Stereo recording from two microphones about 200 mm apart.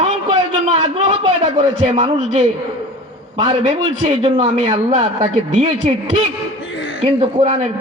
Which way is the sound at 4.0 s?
25° right (ahead or behind).